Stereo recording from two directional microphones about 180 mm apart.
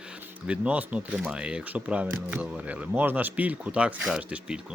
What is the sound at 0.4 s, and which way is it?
Speech, 5° right (ahead or behind).